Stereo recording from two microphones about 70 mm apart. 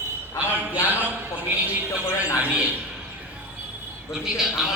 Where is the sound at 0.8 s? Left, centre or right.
Right.